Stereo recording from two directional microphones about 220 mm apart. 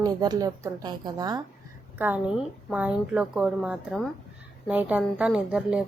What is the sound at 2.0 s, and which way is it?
A woman's voice, 5° right (ahead or behind).